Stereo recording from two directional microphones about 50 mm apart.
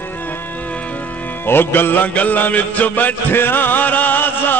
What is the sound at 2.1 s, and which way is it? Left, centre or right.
Music, left.